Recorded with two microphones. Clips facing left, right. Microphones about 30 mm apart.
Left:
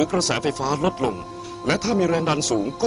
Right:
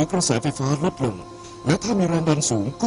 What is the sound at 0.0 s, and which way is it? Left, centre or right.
A man's voice, left.